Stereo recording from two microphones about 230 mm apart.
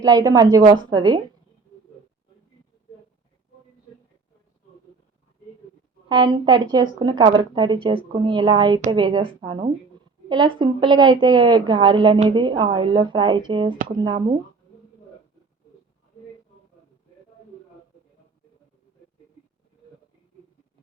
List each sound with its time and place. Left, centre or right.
0.0 s a woman's voice: centre
6.1 s a woman's voice: centre